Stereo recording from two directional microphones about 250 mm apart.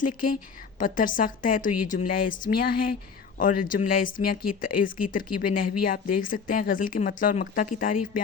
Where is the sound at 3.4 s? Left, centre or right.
Left.